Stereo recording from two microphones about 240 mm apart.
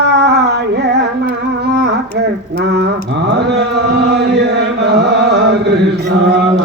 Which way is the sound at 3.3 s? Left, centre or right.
Right.